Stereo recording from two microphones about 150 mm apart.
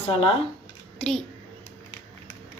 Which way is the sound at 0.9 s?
5° left (ahead or behind).